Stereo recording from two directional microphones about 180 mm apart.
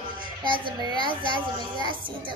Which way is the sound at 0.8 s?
25° right (ahead or behind).